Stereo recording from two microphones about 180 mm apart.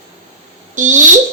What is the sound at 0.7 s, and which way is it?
Speech, 45° right (ahead or behind).